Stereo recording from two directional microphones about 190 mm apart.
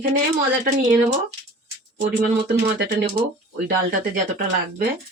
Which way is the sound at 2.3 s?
60° right (ahead or behind).